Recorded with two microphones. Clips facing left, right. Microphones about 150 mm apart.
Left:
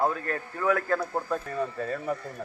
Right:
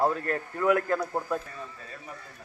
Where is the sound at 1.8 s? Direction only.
55° left (ahead or behind).